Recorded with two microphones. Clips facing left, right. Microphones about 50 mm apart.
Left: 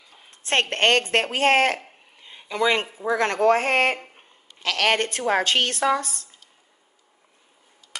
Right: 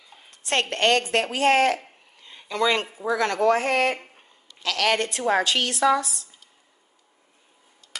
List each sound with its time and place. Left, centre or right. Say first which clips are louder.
0.3 s a woman's voice: left 2 dB; left
2.1 s a sound: even; centre
3.1 s a woman's voice: left 1 dB; left